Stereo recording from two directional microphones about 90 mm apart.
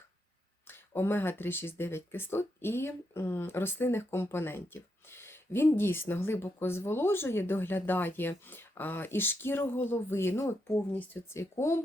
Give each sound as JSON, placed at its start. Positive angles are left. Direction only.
{"t": 0.7, "sound": "speech", "side_deg": 25}